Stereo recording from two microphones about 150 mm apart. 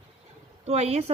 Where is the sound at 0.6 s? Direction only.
45° right (ahead or behind).